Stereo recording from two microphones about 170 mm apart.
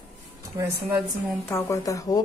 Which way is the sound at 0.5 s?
15° right (ahead or behind).